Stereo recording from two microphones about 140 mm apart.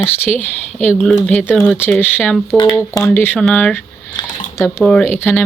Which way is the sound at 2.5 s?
Centre (ahead or behind).